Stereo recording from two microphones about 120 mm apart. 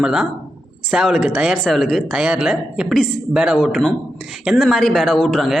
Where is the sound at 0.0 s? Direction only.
5° right (ahead or behind).